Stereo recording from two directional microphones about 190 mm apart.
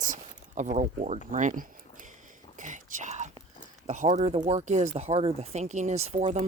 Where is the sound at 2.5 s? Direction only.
40° right (ahead or behind).